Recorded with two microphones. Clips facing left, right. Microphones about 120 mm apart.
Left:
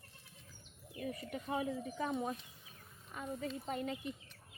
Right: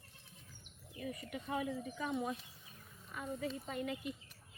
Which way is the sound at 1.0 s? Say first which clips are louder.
Left 2 dB; 35° left (ahead or behind).